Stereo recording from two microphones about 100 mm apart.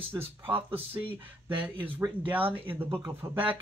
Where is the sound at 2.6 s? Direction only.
20° right (ahead or behind).